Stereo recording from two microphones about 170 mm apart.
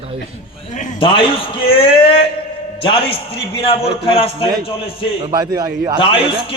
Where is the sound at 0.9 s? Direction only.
30° left (ahead or behind).